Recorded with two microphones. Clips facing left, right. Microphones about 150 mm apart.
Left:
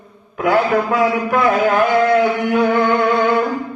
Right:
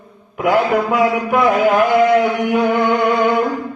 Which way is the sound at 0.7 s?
10° right (ahead or behind).